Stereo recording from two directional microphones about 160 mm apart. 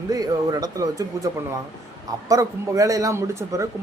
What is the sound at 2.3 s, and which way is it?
Speech, 20° right (ahead or behind).